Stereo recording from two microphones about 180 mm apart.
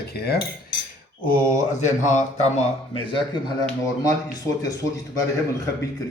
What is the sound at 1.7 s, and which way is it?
Speech, 40° left (ahead or behind).